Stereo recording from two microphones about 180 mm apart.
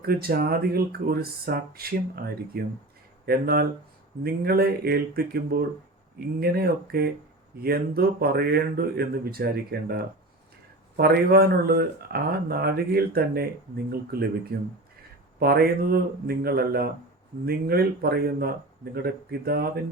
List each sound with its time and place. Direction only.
0.0 s speech: 60° right (ahead or behind)